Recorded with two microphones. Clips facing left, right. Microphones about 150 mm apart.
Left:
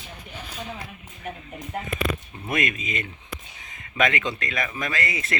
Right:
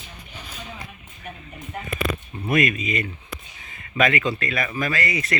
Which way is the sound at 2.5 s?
25° left (ahead or behind).